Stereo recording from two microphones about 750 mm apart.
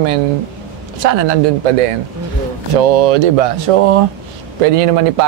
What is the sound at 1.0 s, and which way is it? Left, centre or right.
Speech, right.